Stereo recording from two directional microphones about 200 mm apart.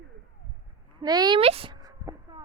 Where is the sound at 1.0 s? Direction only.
20° right (ahead or behind).